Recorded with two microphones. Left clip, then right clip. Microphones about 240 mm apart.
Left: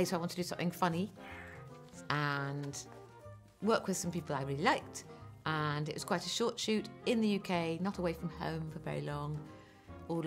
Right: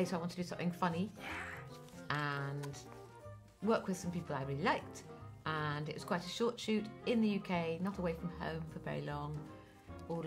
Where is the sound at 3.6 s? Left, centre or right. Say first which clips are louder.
Left 3 dB; left.